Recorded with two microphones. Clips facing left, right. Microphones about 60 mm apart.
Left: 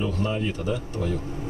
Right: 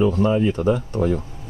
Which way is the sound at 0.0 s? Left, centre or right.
Right.